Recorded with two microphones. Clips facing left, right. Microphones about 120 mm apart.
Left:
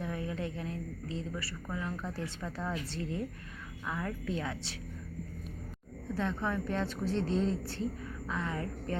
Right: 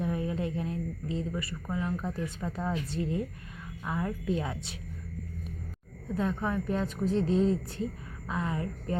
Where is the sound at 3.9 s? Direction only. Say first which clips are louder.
Right 5 dB; 20° right (ahead or behind).